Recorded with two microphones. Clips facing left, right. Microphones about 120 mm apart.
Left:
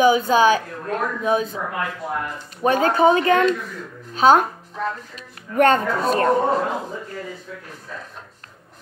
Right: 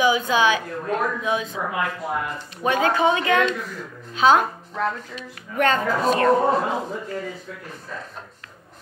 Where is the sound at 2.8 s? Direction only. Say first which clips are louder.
Left 4 dB; 40° left (ahead or behind).